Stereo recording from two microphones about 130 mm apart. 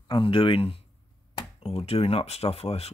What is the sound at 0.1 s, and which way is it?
Speech, 40° left (ahead or behind).